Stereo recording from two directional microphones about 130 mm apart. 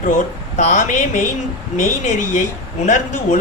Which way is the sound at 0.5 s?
65° left (ahead or behind).